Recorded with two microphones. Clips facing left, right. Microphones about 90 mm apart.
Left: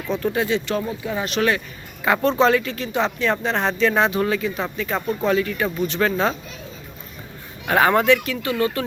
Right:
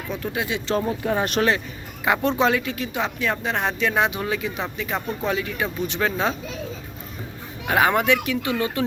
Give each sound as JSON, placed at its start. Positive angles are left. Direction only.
{"t": 0.1, "sound": "speech", "side_deg": -10}
{"t": 0.9, "sound": "speech", "side_deg": -50}
{"t": 1.4, "sound": "speech", "side_deg": -25}
{"t": 7.7, "sound": "speech", "side_deg": -10}